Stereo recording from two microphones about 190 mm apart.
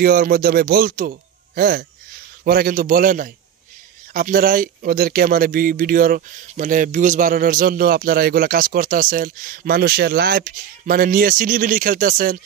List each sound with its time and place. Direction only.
0.0 s speech: 50° right (ahead or behind)